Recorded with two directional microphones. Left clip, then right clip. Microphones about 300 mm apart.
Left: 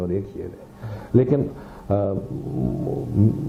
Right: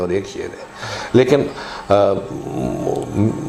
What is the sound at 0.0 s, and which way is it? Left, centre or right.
Speech, centre.